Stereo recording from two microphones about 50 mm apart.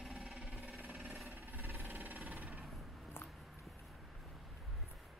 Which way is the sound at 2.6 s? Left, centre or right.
Centre.